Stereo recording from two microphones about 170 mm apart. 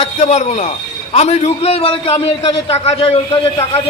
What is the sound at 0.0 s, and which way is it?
A man's voice, 40° left (ahead or behind).